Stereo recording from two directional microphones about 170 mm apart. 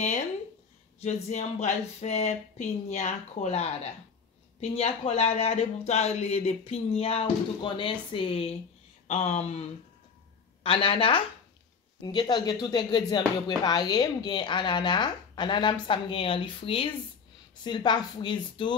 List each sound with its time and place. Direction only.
1.0 s speech: 45° left (ahead or behind)